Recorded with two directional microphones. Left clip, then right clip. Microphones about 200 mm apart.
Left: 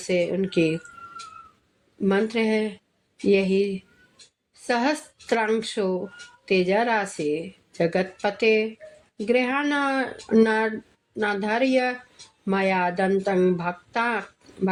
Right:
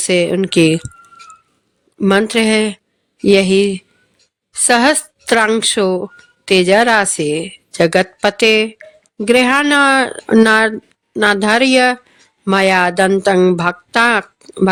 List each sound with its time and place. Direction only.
0.1 s speech: 40° right (ahead or behind)
2.0 s a woman's voice: 45° right (ahead or behind)